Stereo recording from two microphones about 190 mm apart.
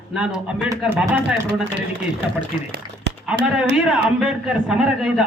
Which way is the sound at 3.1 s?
65° right (ahead or behind).